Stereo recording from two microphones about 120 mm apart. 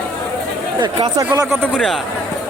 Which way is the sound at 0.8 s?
40° right (ahead or behind).